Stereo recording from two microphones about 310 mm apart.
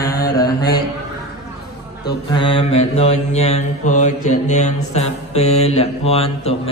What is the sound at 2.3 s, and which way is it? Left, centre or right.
Speech, centre.